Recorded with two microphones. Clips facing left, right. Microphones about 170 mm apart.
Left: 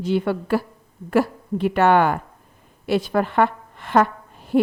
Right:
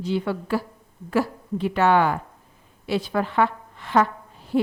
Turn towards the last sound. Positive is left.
turn(degrees=55)  # may be behind; listen again after turning